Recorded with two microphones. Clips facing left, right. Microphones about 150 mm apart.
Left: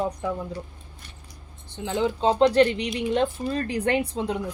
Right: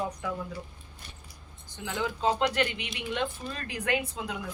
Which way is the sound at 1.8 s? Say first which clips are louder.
Left 7 dB; 30° left (ahead or behind).